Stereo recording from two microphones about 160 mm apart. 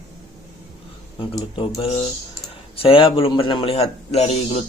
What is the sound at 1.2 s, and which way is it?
Speech, 30° left (ahead or behind).